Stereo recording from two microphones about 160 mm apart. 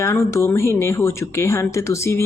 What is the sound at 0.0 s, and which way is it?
Speech, 20° left (ahead or behind).